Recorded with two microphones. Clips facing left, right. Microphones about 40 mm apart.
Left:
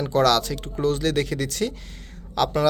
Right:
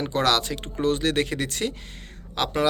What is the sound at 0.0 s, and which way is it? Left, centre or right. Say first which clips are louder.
Speech: left 3 dB; right.